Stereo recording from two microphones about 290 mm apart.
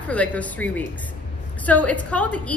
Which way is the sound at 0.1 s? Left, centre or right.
Centre.